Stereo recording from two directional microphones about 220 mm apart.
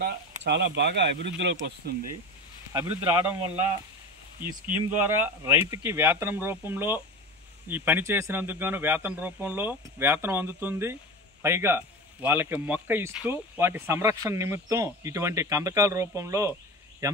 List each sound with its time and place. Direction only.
0.4 s speech: 50° right (ahead or behind)
2.7 s speech: 10° right (ahead or behind)
4.6 s speech: 10° right (ahead or behind)